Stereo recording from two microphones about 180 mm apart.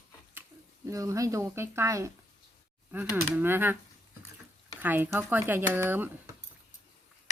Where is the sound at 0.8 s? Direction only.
15° right (ahead or behind).